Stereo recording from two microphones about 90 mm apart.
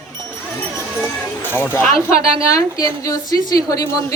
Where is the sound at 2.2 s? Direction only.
40° left (ahead or behind).